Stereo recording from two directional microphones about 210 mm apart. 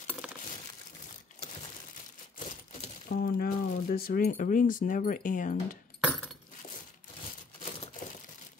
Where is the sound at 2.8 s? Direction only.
40° left (ahead or behind).